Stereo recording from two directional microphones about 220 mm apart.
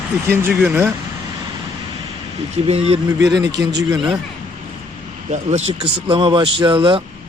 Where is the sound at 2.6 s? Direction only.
25° right (ahead or behind).